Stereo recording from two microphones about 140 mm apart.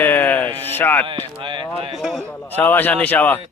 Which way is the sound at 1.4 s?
35° right (ahead or behind).